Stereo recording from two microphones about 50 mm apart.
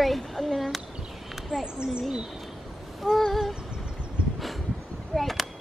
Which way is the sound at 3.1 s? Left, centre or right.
Centre.